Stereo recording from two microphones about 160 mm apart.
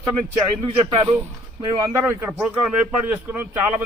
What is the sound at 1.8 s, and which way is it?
A man's voice, 20° right (ahead or behind).